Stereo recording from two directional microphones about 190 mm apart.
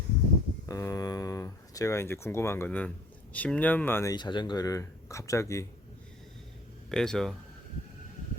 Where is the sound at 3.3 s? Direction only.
5° left (ahead or behind).